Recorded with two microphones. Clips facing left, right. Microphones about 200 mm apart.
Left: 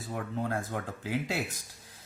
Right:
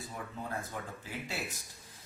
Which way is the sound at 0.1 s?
75° left (ahead or behind).